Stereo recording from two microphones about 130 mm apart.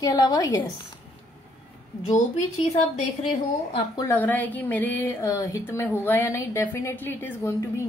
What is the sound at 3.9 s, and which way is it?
Speech, 15° left (ahead or behind).